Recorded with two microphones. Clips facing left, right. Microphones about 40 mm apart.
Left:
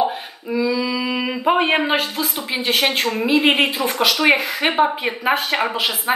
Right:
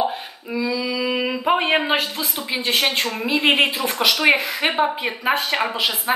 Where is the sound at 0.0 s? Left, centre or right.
Centre.